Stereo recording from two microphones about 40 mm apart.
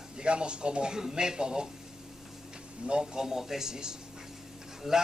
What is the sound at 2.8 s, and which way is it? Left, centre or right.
Speech, right.